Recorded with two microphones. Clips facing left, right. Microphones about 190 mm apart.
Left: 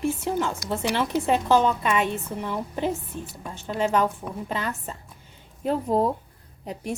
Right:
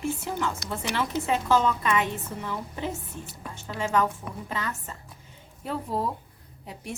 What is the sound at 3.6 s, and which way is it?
A woman's voice, 30° left (ahead or behind).